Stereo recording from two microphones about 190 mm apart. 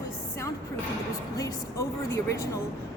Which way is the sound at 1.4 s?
15° left (ahead or behind).